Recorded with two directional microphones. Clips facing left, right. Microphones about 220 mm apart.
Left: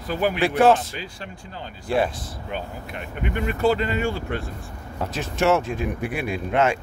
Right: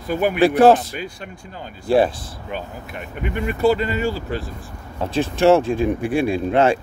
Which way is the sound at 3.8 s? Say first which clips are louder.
Right 2 dB; 40° right (ahead or behind).